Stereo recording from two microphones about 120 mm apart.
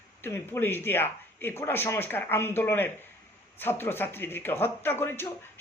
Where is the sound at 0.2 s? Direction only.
20° left (ahead or behind).